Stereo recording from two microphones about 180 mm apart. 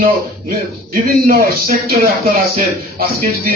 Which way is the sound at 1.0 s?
55° right (ahead or behind).